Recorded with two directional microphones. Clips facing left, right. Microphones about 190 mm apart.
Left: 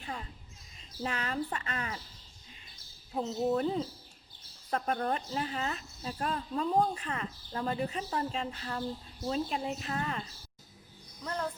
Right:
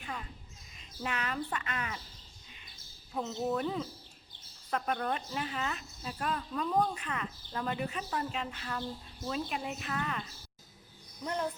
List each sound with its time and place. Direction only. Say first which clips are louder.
0.0 s basketball bounce: left 1 dB; 30° left (ahead or behind)
0.8 s speech: left 1 dB; 30° left (ahead or behind)
3.2 s speech: left 3 dB; 30° left (ahead or behind)
11.2 s speech: right 1 dB; 20° right (ahead or behind)